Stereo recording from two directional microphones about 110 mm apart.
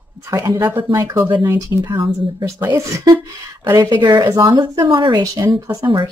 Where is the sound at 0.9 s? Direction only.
35° right (ahead or behind).